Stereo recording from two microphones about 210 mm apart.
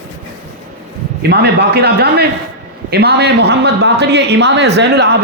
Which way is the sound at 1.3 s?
50° right (ahead or behind).